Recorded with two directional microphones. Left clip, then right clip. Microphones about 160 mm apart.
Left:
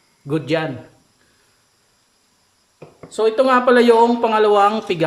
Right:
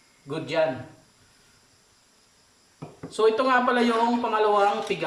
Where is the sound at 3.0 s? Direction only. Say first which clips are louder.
Left 6 dB; 50° left (ahead or behind); by 4.9 s 65° left (ahead or behind).